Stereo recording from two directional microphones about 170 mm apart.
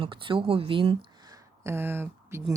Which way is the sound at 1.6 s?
15° right (ahead or behind).